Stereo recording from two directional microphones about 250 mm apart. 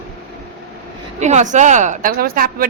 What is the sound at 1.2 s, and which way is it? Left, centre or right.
A woman's voice, right.